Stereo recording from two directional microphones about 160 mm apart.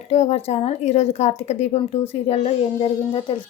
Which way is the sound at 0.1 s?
45° left (ahead or behind).